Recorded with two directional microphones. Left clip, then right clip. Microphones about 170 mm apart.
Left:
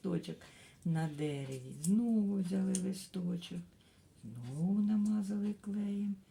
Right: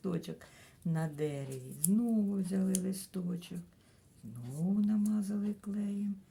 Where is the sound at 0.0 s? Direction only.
20° right (ahead or behind).